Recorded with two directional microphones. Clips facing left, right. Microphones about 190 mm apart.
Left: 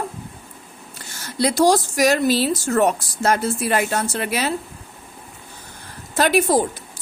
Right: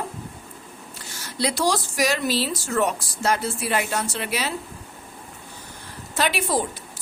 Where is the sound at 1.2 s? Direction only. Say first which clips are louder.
Left 6 dB; 45° left (ahead or behind).